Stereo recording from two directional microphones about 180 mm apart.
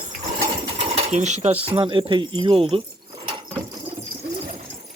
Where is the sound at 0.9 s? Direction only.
35° right (ahead or behind).